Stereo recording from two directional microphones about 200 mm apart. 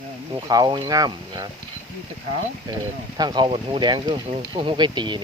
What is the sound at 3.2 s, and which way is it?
Speech, 20° right (ahead or behind).